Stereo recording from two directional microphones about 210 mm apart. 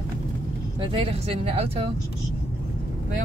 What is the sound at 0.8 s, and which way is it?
Speech, 25° right (ahead or behind).